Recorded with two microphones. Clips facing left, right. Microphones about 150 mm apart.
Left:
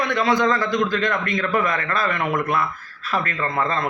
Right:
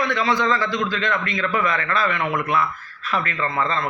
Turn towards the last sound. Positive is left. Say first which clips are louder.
# even
turn(degrees=50)  # may be behind; listen again after turning